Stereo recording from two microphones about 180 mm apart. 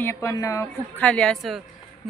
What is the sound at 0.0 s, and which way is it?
A woman's voice, 15° left (ahead or behind).